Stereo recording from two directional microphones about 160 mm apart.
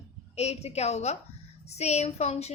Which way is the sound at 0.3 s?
40° left (ahead or behind).